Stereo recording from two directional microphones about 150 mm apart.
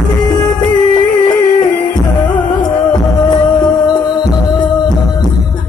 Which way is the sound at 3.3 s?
30° left (ahead or behind).